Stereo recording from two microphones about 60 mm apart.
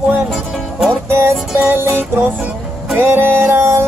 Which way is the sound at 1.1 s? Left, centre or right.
Right.